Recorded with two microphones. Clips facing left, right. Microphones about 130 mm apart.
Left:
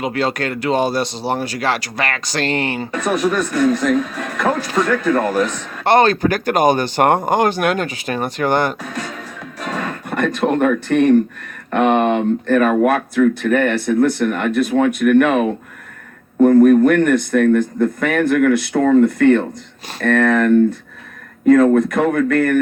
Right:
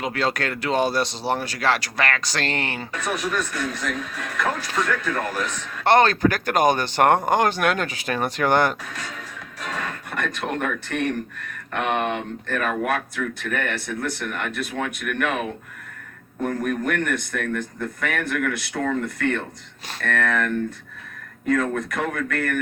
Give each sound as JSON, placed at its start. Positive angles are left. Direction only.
{"t": 0.0, "sound": "speech", "side_deg": 5}
{"t": 2.9, "sound": "speech", "side_deg": 45}
{"t": 5.8, "sound": "speech", "side_deg": 10}
{"t": 9.1, "sound": "music", "side_deg": 35}
{"t": 11.7, "sound": "speech", "side_deg": 35}